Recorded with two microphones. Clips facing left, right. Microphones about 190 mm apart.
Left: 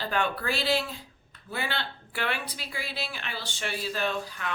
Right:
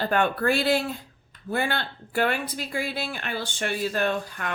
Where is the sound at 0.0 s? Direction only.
50° right (ahead or behind).